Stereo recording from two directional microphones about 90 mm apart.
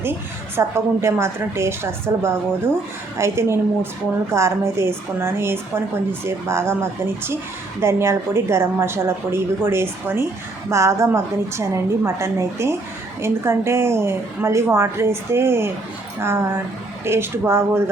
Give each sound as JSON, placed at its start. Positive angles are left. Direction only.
{"t": 0.0, "sound": "a woman's voice", "side_deg": -25}
{"t": 7.8, "sound": "a woman's voice", "side_deg": -30}